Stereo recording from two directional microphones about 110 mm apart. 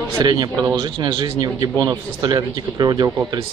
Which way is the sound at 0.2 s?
40° right (ahead or behind).